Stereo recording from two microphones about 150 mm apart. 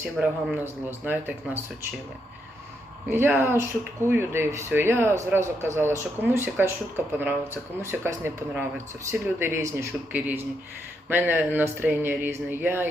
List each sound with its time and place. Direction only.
0.0 s speech: 5° right (ahead or behind)
3.1 s speech: 15° right (ahead or behind)